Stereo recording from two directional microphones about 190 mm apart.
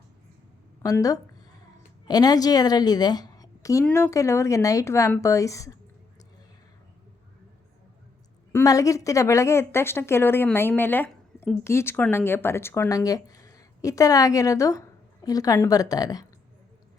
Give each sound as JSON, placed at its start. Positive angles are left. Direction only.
{"t": 0.8, "sound": "a woman's voice", "side_deg": 20}
{"t": 8.5, "sound": "speech", "side_deg": 15}